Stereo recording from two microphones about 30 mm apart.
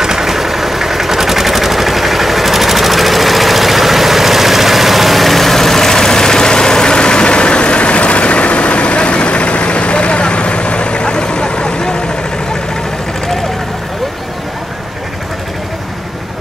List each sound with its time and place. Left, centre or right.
0.0 s vehicle: centre; by 11.9 s left